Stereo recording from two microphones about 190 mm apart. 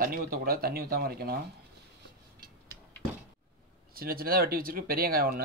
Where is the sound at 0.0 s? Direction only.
50° right (ahead or behind).